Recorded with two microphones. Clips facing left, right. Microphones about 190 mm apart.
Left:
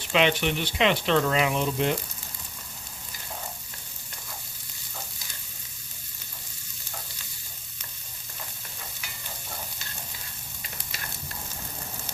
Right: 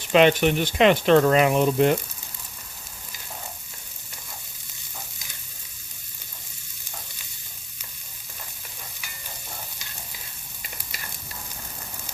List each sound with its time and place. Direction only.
0.1 s speech: 45° right (ahead or behind)